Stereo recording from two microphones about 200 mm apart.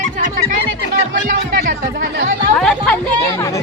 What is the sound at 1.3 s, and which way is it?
Music, 45° right (ahead or behind).